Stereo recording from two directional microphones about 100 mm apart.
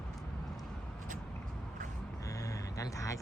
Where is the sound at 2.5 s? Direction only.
35° left (ahead or behind).